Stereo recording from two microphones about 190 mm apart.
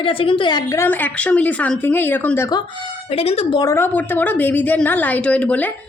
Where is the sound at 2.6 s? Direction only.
30° left (ahead or behind).